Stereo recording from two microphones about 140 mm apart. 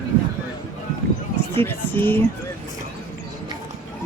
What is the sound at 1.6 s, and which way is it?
Speech, 15° left (ahead or behind).